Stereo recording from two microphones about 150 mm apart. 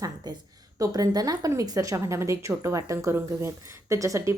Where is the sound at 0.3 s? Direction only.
25° right (ahead or behind).